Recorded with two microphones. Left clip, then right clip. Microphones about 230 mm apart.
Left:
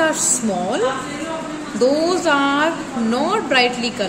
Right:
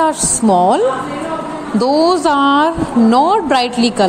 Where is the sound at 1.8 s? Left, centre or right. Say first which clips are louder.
Right 4 dB; right.